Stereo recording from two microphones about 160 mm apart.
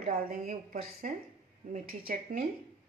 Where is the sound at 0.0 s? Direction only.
65° right (ahead or behind).